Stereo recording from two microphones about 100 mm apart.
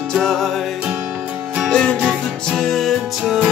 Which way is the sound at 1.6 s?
10° left (ahead or behind).